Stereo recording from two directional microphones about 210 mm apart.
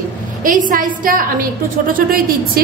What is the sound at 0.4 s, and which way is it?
A woman's voice, 40° right (ahead or behind).